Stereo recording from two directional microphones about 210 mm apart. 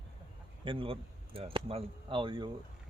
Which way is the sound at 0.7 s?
25° right (ahead or behind).